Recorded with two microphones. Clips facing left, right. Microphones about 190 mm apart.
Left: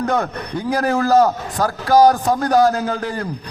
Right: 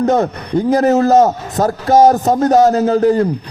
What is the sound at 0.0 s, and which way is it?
A man's voice, 25° right (ahead or behind).